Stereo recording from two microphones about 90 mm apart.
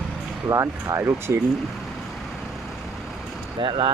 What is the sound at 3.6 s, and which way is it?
Speech, 60° right (ahead or behind).